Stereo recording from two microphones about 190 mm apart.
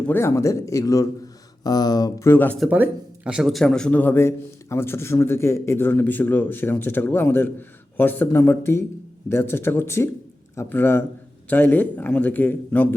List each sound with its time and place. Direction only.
0.1 s a man's voice: 15° left (ahead or behind)
2.6 s a man's voice: 10° right (ahead or behind); by 12.9 s 10° left (ahead or behind)